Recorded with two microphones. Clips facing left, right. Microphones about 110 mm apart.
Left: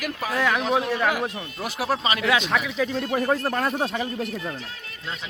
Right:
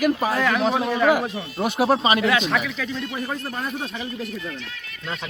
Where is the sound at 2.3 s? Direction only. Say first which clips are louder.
Right 1 dB; 15° left (ahead or behind).